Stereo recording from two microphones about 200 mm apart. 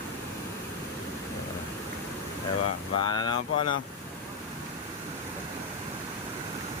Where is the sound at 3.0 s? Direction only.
20° left (ahead or behind).